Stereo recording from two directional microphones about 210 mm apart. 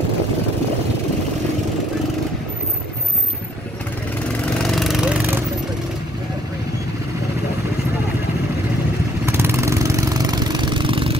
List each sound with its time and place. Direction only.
4.6 s vehicle: centre (ahead or behind)
9.2 s vehicle: 10° right (ahead or behind)